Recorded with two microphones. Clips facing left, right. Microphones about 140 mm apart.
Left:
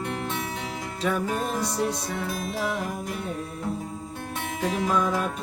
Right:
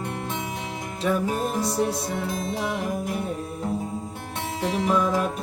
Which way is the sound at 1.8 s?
25° right (ahead or behind).